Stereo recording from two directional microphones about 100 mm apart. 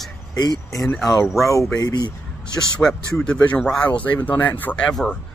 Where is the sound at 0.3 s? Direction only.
45° left (ahead or behind).